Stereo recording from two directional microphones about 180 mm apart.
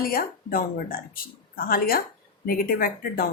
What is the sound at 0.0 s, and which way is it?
A woman's voice, 55° left (ahead or behind).